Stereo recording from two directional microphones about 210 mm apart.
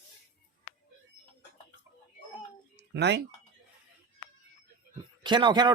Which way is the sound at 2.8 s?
55° right (ahead or behind).